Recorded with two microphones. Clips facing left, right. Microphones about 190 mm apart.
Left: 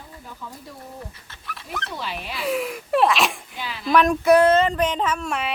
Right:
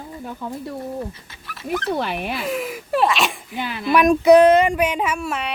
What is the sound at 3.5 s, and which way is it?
Speech, 55° right (ahead or behind).